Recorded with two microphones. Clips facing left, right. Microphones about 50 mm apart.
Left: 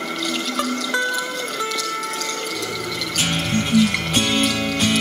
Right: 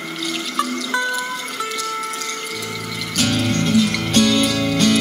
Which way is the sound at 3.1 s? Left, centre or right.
Left.